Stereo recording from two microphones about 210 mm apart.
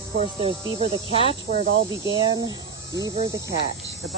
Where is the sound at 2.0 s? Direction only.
20° right (ahead or behind).